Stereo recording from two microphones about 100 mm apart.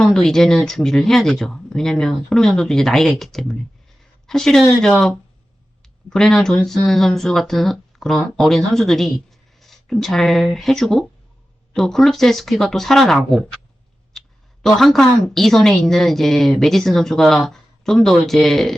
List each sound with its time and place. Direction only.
0.0 s a woman's voice: 5° left (ahead or behind)